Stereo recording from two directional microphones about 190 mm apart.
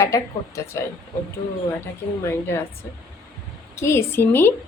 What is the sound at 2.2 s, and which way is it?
Speech, 10° left (ahead or behind).